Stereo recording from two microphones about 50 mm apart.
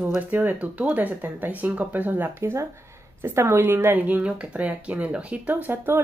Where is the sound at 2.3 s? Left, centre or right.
Right.